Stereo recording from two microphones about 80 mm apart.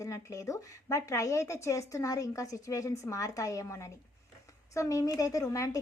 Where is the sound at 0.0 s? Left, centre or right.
Left.